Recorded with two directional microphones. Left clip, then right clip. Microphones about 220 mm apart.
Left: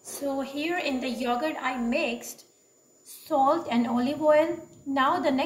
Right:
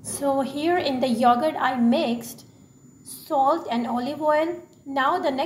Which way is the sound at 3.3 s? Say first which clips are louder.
Right 2 dB; 25° right (ahead or behind).